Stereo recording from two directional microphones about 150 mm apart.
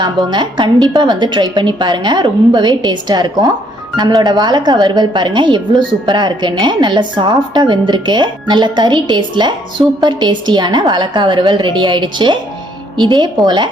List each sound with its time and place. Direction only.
0.0 s speech: 30° right (ahead or behind)